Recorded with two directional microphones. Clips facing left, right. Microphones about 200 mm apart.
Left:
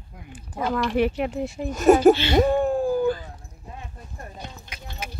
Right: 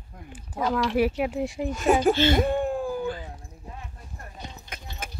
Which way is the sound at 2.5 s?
40° left (ahead or behind).